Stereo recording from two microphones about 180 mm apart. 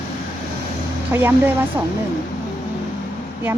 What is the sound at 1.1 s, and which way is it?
Speech, 10° right (ahead or behind).